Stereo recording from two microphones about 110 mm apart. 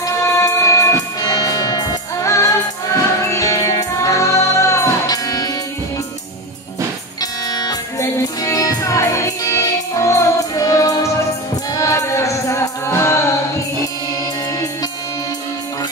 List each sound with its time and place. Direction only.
0.0 s music: 30° left (ahead or behind)
7.2 s music: 35° left (ahead or behind)